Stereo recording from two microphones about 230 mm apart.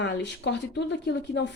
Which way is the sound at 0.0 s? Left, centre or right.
Left.